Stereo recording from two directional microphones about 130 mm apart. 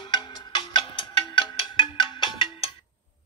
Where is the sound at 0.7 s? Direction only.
40° left (ahead or behind).